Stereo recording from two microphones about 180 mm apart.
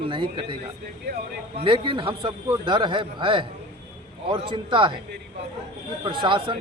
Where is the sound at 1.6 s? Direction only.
30° right (ahead or behind).